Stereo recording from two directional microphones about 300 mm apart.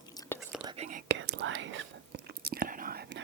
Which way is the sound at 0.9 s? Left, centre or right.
Right.